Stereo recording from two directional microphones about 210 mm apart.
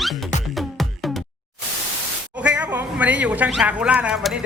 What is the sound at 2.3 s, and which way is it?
A man's voice, 5° right (ahead or behind).